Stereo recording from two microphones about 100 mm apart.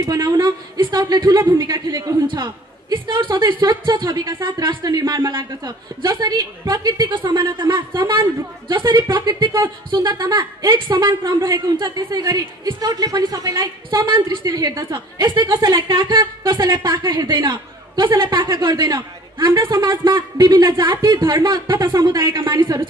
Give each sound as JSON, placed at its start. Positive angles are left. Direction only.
{"t": 0.0, "sound": "a man's voice", "side_deg": -40}
{"t": 14.4, "sound": "a man's voice", "side_deg": -40}